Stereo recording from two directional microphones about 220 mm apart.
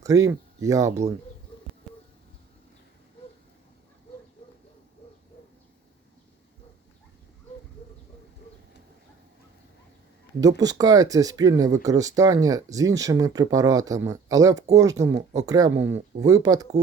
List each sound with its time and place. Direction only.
0.0 s speech: 15° right (ahead or behind)
10.4 s speech: 15° right (ahead or behind)